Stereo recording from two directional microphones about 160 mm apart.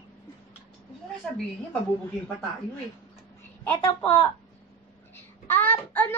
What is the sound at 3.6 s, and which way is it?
Speech, 15° left (ahead or behind).